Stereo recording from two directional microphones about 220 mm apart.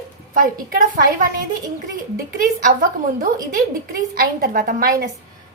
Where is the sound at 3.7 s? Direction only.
40° right (ahead or behind).